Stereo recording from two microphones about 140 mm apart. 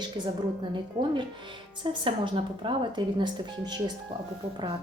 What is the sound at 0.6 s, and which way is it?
A woman's voice, 35° right (ahead or behind).